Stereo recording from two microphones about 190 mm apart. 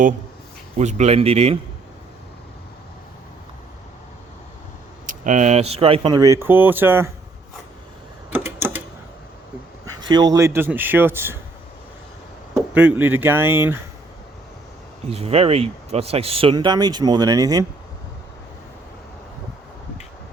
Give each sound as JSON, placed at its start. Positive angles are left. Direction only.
{"t": 0.8, "sound": "a man's voice", "side_deg": -35}
{"t": 5.2, "sound": "speech", "side_deg": -40}
{"t": 8.3, "sound": "a sound", "side_deg": -10}
{"t": 10.1, "sound": "a man's voice", "side_deg": -20}
{"t": 12.5, "sound": "speech", "side_deg": -5}
{"t": 15.1, "sound": "speech", "side_deg": -30}